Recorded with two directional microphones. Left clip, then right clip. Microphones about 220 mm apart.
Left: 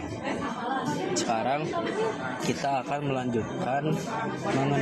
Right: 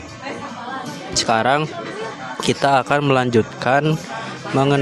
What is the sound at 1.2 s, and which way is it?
A man's voice, 40° right (ahead or behind).